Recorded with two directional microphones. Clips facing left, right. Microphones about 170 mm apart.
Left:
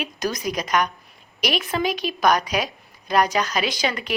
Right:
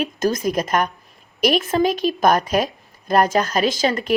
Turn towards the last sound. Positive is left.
turn(degrees=-40)  # may be behind; listen again after turning